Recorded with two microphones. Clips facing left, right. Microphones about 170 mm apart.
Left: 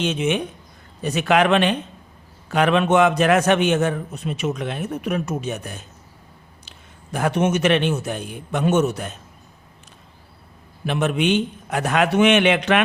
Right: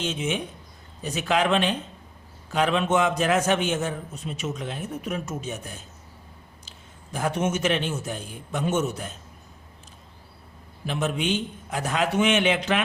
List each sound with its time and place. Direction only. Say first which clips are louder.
0.0 s a man's voice: left 6 dB; 70° left (ahead or behind)
10.8 s a man's voice: left 6 dB; 70° left (ahead or behind)